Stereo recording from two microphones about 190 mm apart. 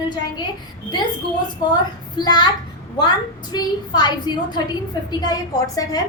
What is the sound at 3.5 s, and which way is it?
A child's voice, 20° left (ahead or behind).